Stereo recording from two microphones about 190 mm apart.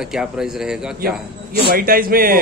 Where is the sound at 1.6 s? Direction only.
55° right (ahead or behind).